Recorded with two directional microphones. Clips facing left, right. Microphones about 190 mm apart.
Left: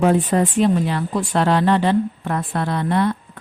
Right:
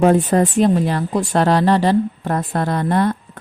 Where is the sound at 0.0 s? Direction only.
45° right (ahead or behind).